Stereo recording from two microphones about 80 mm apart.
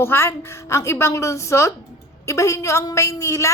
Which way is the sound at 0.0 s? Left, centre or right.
Left.